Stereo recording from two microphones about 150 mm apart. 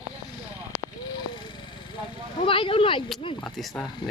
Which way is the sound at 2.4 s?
35° left (ahead or behind).